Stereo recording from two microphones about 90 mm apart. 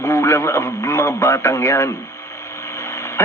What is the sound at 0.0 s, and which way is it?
A man's voice, 30° left (ahead or behind).